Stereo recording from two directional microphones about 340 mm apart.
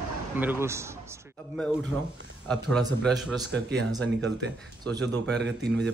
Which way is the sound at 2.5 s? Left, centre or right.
Centre.